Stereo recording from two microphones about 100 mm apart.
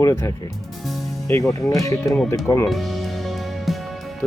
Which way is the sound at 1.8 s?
30° left (ahead or behind).